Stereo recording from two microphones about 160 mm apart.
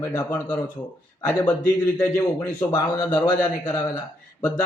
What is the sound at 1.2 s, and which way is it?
Speech, 10° left (ahead or behind).